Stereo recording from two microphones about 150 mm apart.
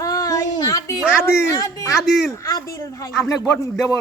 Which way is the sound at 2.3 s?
25° left (ahead or behind).